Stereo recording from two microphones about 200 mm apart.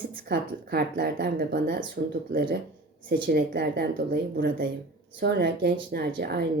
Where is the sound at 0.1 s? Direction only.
55° right (ahead or behind).